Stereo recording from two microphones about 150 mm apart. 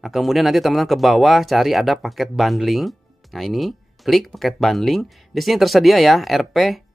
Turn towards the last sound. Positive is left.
turn(degrees=0)  # may be behind; listen again after turning